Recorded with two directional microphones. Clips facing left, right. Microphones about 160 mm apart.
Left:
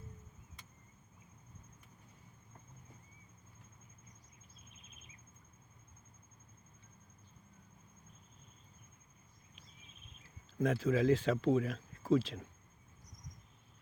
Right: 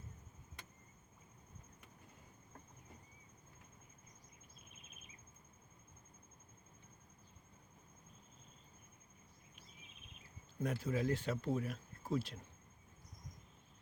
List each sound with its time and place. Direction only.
10.6 s speech: 90° left